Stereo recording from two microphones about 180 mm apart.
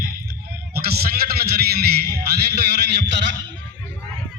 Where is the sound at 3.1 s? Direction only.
75° right (ahead or behind).